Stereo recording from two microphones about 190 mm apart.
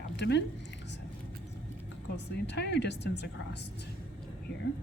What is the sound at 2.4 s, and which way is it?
Speech, 65° left (ahead or behind).